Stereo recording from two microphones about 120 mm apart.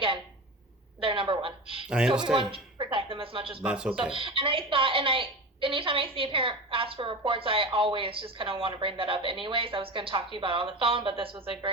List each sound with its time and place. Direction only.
1.0 s a woman's voice: 45° right (ahead or behind)
1.9 s speech: 5° right (ahead or behind)
2.2 s a woman's voice: 45° right (ahead or behind)
3.6 s speech: 10° right (ahead or behind)
3.9 s a woman's voice: 45° right (ahead or behind)